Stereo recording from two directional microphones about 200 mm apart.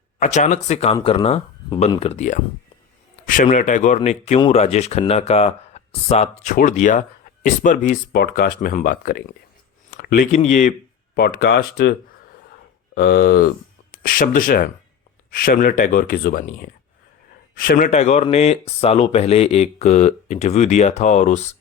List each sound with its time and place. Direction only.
0.2 s speech: 35° left (ahead or behind)